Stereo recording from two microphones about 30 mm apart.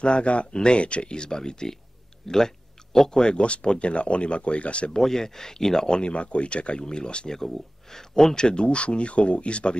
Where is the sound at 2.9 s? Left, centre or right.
Left.